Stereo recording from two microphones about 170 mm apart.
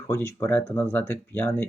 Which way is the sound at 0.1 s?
15° left (ahead or behind).